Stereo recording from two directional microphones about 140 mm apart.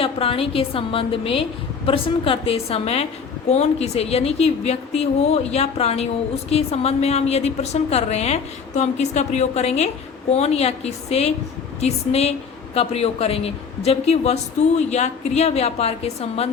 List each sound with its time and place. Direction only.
0.0 s a woman's voice: 40° left (ahead or behind)